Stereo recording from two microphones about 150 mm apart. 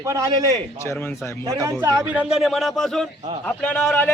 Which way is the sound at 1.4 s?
20° right (ahead or behind).